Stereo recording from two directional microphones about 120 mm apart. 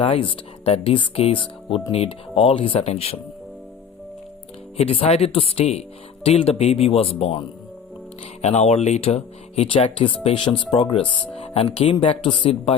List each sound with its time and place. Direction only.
0.0 s speech: 50° left (ahead or behind)
4.8 s speech: 55° left (ahead or behind)
8.4 s speech: 60° left (ahead or behind); by 10.9 s 40° left (ahead or behind)
10.9 s speech: 55° left (ahead or behind)